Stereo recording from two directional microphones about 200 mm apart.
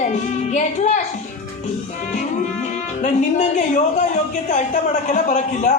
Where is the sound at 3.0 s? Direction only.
40° left (ahead or behind).